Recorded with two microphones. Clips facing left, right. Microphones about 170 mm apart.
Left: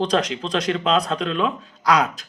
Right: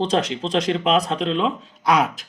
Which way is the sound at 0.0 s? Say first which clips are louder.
Even; 30° right (ahead or behind).